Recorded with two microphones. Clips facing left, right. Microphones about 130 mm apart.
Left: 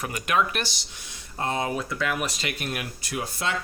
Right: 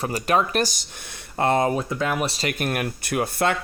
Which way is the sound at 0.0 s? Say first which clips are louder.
Right 3 dB; 35° right (ahead or behind).